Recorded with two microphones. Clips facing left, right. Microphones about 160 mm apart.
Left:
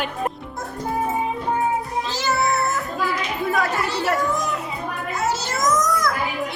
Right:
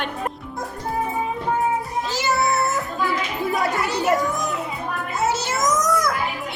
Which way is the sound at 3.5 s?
20° right (ahead or behind).